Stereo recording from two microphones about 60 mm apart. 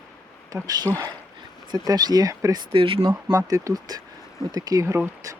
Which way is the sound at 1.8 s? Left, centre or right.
Right.